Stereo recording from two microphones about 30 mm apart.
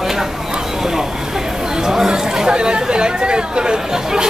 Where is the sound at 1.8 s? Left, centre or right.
Centre.